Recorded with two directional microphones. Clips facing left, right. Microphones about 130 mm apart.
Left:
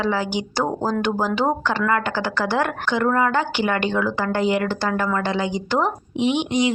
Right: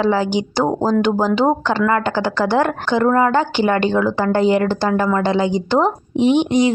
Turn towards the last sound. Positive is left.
turn(degrees=-40)  # may be behind; listen again after turning